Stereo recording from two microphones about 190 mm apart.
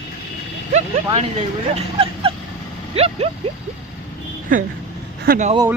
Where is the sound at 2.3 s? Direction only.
30° right (ahead or behind).